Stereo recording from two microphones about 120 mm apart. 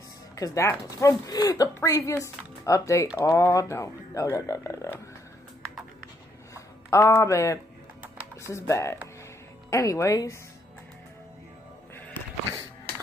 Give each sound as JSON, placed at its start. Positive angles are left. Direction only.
{"t": 0.4, "sound": "speech", "side_deg": 25}
{"t": 6.5, "sound": "music", "side_deg": 25}
{"t": 8.4, "sound": "speech", "side_deg": 25}